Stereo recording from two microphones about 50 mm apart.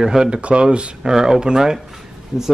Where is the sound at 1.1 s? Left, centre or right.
Centre.